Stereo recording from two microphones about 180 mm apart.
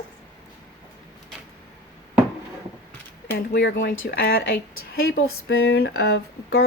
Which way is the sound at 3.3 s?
70° left (ahead or behind).